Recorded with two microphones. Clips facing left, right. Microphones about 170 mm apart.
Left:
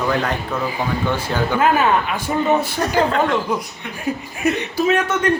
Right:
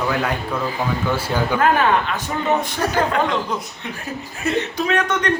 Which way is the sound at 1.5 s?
10° left (ahead or behind).